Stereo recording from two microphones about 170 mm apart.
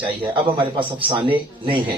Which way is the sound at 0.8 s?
30° right (ahead or behind).